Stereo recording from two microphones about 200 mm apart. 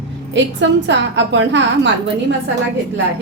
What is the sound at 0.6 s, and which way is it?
A woman's voice, 60° right (ahead or behind).